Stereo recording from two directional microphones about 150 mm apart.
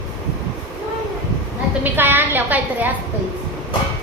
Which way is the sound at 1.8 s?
15° right (ahead or behind).